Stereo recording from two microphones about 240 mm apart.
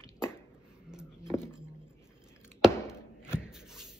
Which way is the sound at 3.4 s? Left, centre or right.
Centre.